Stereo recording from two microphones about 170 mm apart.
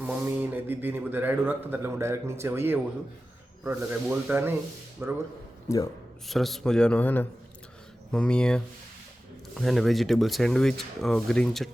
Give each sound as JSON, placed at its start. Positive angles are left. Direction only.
{"t": 0.0, "sound": "speech", "side_deg": -10}
{"t": 5.6, "sound": "speech", "side_deg": 20}
{"t": 6.2, "sound": "speech", "side_deg": 0}